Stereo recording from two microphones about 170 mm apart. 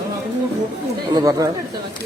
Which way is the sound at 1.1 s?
20° right (ahead or behind).